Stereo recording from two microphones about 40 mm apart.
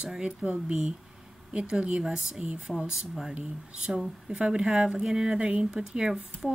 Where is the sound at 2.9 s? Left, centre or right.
Centre.